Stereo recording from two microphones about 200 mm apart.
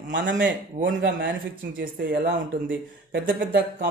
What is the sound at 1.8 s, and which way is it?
Speech, 50° right (ahead or behind).